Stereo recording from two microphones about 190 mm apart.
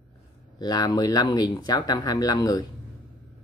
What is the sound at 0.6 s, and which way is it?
Speech, 20° left (ahead or behind).